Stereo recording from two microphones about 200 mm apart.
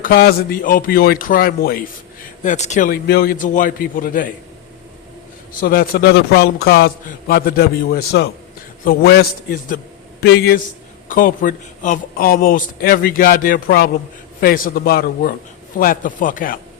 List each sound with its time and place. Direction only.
0.0 s a man's voice: 50° left (ahead or behind)
2.4 s a man's voice: 35° left (ahead or behind)
5.5 s a man's voice: 45° left (ahead or behind)